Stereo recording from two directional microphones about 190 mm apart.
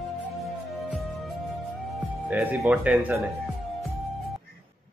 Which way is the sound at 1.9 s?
5° right (ahead or behind).